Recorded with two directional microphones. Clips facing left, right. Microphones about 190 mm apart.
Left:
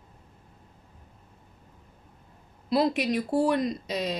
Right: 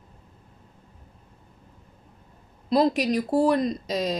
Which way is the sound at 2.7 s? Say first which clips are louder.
Right 3 dB; 40° right (ahead or behind).